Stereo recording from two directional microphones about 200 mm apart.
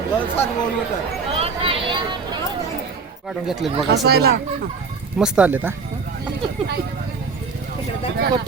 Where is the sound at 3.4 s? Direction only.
Centre (ahead or behind).